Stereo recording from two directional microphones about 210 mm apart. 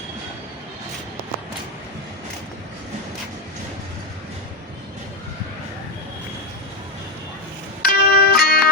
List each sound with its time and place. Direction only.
7.8 s music: 45° left (ahead or behind)